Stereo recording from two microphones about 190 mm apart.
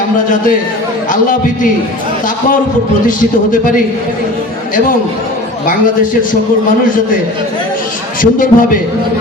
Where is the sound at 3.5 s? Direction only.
45° left (ahead or behind).